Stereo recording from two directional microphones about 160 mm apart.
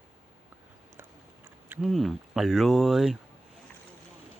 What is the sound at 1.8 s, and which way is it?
Speech, centre (ahead or behind).